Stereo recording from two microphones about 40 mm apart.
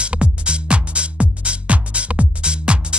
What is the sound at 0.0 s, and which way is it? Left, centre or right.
Music, right.